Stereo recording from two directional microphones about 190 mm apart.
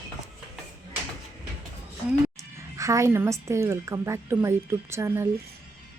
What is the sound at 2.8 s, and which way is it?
A woman's voice, 15° right (ahead or behind).